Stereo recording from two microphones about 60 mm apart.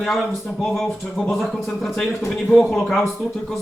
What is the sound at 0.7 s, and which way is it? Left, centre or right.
Speech, centre.